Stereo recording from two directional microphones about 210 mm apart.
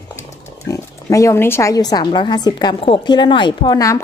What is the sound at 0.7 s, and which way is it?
Speech, 15° left (ahead or behind).